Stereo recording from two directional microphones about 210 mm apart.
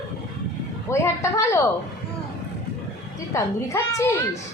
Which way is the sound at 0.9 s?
15° left (ahead or behind).